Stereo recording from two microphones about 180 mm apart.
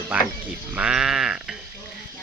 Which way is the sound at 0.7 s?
5° right (ahead or behind).